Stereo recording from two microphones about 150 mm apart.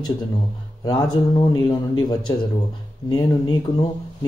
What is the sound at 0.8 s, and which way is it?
A man's voice, 25° left (ahead or behind).